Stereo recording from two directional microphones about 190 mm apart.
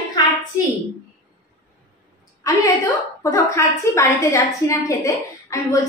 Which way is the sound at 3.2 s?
15° left (ahead or behind).